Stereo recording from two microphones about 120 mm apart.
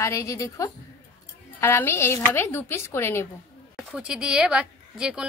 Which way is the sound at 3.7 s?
5° right (ahead or behind).